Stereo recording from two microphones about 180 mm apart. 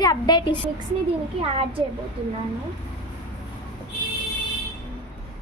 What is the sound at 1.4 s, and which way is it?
Speech, 30° right (ahead or behind).